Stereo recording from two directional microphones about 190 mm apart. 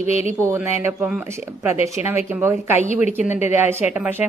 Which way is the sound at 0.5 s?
10° right (ahead or behind).